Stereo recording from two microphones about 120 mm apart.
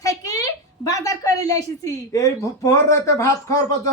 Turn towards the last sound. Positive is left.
turn(degrees=25)  # may be behind; listen again after turning